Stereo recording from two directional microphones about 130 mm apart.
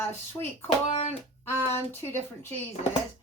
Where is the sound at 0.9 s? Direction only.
55° left (ahead or behind).